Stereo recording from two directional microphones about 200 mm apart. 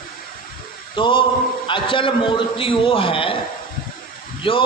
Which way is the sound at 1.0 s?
25° left (ahead or behind).